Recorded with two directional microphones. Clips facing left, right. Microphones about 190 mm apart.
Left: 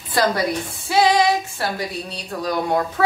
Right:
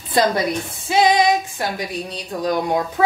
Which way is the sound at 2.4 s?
15° right (ahead or behind).